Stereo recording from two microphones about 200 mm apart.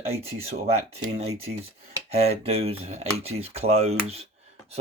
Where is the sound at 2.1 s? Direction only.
30° right (ahead or behind).